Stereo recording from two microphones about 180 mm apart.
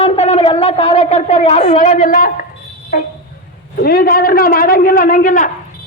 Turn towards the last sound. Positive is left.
turn(degrees=50)  # may be behind; listen again after turning